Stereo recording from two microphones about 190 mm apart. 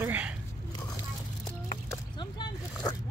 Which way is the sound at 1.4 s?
20° left (ahead or behind).